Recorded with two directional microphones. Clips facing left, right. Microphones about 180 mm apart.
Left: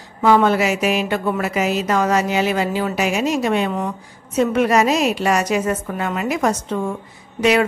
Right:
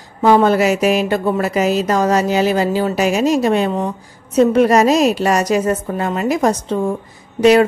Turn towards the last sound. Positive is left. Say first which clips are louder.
# right 6 dB
turn(degrees=-35)  # may be behind; listen again after turning